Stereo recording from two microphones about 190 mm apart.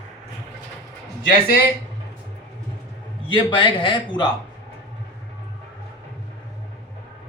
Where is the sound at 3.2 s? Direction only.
25° left (ahead or behind).